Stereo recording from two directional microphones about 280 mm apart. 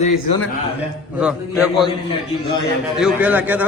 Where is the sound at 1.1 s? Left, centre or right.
Centre.